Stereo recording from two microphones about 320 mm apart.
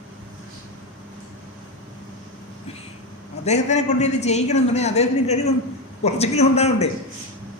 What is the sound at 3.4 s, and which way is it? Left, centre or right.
A man's voice, left.